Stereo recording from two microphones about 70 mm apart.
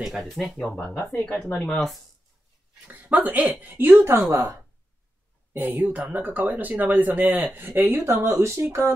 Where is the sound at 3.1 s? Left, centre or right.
Right.